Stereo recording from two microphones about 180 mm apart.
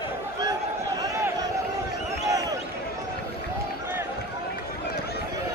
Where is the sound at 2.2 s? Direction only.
20° right (ahead or behind).